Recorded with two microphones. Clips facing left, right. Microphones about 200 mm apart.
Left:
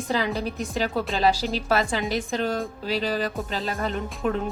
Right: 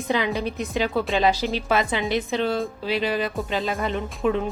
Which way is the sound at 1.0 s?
Centre (ahead or behind).